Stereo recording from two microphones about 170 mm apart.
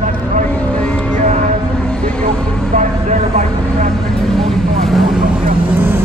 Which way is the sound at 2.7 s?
50° right (ahead or behind).